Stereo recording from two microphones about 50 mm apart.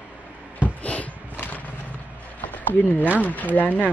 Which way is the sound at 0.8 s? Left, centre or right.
Left.